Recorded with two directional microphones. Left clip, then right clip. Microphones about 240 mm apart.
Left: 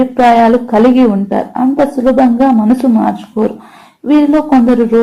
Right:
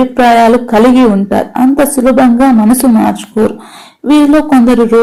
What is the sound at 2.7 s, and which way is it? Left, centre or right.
Speech, right.